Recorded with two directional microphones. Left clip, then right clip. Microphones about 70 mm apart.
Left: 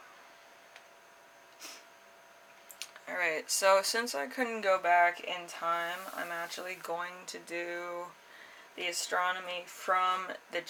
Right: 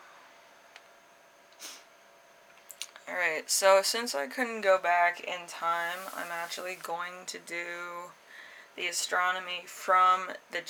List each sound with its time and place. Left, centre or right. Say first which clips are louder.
1.6 s a sound: right 2 dB; right
2.7 s speech: right 2 dB; right
6.5 s speech: right 2 dB; right